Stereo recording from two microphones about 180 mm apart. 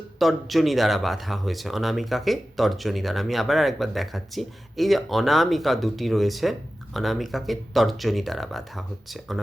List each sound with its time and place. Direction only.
0.2 s speech: centre (ahead or behind)